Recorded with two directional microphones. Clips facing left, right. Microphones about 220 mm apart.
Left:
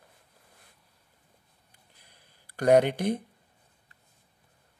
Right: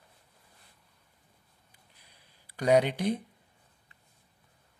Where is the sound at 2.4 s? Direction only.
50° left (ahead or behind).